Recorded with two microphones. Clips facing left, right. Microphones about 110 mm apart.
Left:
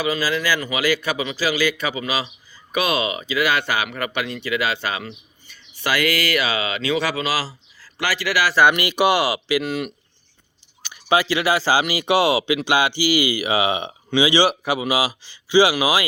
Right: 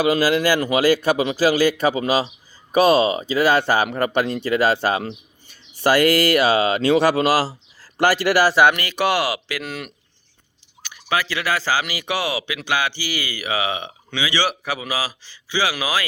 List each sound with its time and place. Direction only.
0.1 s a man's voice: 60° right (ahead or behind)
8.6 s speech: 10° left (ahead or behind)
10.8 s speech: 20° left (ahead or behind)